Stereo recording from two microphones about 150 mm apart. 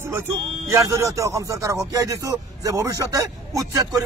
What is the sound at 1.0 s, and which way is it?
Speech, 20° right (ahead or behind).